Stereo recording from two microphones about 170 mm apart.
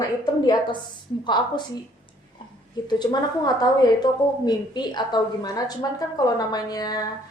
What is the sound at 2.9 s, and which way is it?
A woman's voice, 25° left (ahead or behind).